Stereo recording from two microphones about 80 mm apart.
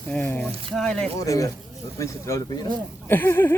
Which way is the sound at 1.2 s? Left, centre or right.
Left.